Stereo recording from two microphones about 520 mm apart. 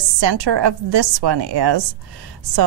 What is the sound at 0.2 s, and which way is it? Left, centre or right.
A woman's voice, right.